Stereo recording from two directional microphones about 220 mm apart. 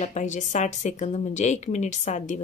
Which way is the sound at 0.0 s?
35° left (ahead or behind).